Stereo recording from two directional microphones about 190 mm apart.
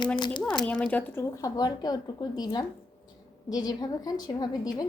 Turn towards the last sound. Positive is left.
turn(degrees=20)  # may be behind; listen again after turning